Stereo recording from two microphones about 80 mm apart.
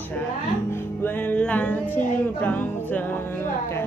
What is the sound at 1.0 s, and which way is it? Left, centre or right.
Music, left.